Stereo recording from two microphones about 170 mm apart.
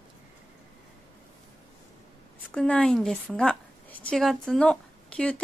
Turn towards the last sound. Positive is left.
turn(degrees=5)  # may be behind; listen again after turning